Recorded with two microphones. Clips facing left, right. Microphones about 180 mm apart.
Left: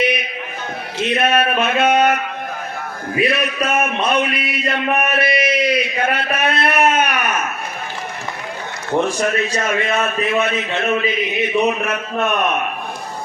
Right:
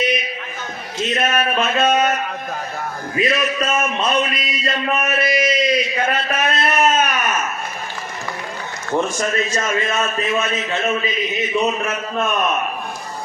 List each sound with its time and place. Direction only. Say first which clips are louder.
0.9 s speech: left 3 dB; 60° left (ahead or behind)
3.2 s a man's voice: right 1 dB; 60° left (ahead or behind)
9.0 s a man's voice: left 2 dB; 60° left (ahead or behind)